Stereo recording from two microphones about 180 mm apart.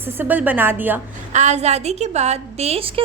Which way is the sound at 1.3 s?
40° right (ahead or behind).